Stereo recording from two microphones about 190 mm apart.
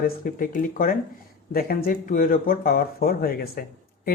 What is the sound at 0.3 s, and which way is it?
Speech, 45° left (ahead or behind).